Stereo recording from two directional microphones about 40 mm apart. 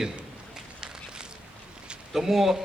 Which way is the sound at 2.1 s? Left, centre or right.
Centre.